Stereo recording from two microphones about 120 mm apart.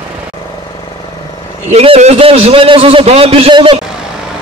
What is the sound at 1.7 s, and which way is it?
A man's voice, 65° right (ahead or behind).